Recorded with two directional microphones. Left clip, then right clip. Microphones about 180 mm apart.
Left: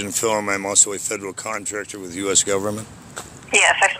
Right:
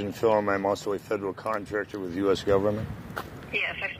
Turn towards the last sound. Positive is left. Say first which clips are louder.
# left 14 dB
turn(degrees=40)  # may be behind; listen again after turning